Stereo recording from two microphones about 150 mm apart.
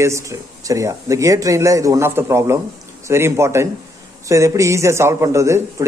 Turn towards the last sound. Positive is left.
turn(degrees=-20)  # may be behind; listen again after turning